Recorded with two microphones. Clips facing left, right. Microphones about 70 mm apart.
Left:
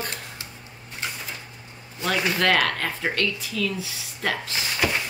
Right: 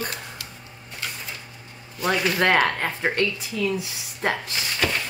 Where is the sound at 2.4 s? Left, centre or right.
Centre.